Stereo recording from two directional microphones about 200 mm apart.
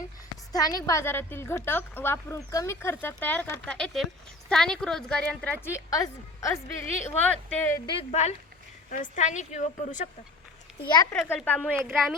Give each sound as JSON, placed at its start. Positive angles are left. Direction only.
{"t": 0.5, "sound": "a woman's voice", "side_deg": 20}
{"t": 7.9, "sound": "a woman's voice", "side_deg": 35}
{"t": 10.8, "sound": "a woman's voice", "side_deg": 20}